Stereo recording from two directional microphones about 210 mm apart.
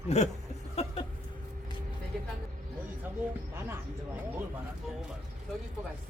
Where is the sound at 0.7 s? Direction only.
25° left (ahead or behind).